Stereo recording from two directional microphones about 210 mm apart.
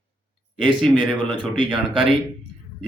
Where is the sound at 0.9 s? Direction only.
5° left (ahead or behind).